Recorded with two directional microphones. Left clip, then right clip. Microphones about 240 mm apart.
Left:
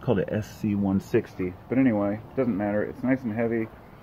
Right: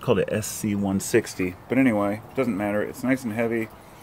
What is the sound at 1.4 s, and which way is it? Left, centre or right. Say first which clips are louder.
Speech: right 2 dB; right.